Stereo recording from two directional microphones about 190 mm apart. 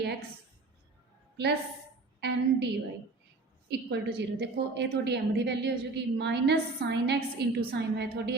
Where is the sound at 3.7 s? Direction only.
60° right (ahead or behind).